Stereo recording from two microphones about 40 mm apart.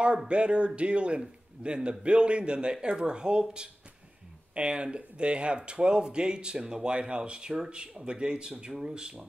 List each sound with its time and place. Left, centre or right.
0.3 s speech: right